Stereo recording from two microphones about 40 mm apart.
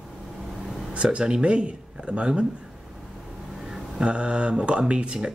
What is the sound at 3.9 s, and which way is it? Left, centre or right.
Speech, right.